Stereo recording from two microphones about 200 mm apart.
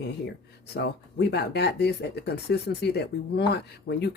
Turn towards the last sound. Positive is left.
turn(degrees=55)  # may be behind; listen again after turning